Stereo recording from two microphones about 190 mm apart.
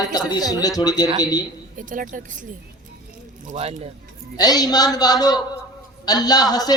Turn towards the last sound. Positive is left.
turn(degrees=20)  # may be behind; listen again after turning